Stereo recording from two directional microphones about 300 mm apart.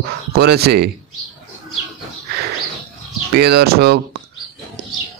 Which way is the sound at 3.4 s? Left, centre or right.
Right.